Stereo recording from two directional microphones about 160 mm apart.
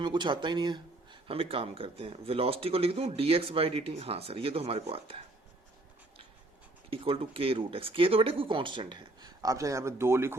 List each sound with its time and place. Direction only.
0.0 s speech: 30° right (ahead or behind)
6.9 s speech: 35° right (ahead or behind); by 10.3 s 15° right (ahead or behind)